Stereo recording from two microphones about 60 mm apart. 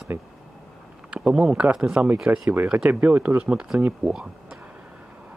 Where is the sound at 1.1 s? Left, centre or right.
Centre.